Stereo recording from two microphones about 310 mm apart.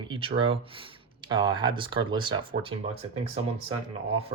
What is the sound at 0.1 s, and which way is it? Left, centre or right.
Speech, centre.